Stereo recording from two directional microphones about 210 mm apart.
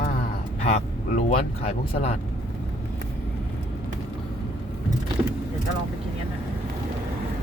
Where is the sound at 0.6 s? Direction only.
35° left (ahead or behind).